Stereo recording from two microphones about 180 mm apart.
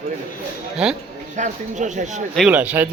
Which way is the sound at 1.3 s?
40° right (ahead or behind).